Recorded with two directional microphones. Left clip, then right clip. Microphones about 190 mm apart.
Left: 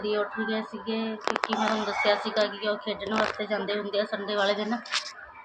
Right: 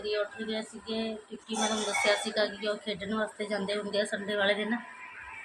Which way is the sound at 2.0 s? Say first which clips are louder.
Left 3 dB; 5° left (ahead or behind).